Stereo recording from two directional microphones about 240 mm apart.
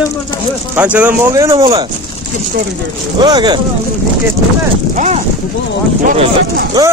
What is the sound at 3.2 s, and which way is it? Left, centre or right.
Speech, centre.